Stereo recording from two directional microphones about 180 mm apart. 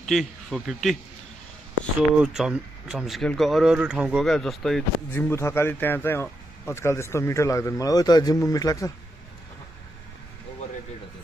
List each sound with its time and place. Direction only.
0.0 s a man's voice: centre (ahead or behind)
2.0 s speech: 5° right (ahead or behind)
5.3 s speech: 15° left (ahead or behind)